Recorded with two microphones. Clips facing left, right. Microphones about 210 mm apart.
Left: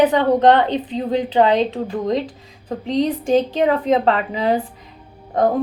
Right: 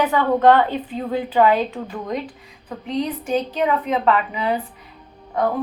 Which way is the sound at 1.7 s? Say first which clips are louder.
Left 6 dB; 35° left (ahead or behind).